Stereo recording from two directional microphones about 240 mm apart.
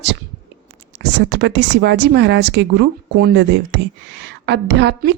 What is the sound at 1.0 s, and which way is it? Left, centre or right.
A woman's voice, right.